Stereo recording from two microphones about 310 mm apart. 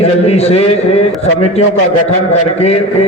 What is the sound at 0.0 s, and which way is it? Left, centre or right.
A man's voice, centre.